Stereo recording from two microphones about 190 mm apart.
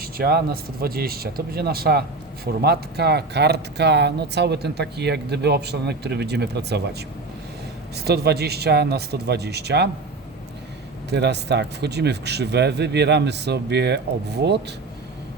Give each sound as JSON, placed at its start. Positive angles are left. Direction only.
{"t": 0.0, "sound": "speech", "side_deg": -55}
{"t": 7.9, "sound": "speech", "side_deg": -60}
{"t": 11.1, "sound": "speech", "side_deg": -60}